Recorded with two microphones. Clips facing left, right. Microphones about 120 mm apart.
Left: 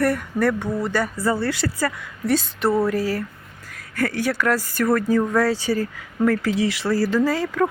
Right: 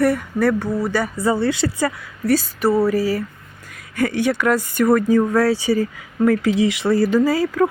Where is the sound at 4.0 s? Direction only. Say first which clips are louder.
Right 3 dB; centre (ahead or behind).